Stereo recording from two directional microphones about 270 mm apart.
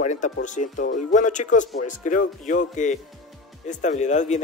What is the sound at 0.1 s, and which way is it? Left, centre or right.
Speech, left.